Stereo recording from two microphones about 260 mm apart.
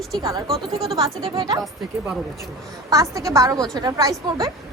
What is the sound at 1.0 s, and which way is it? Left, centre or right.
Speech, centre.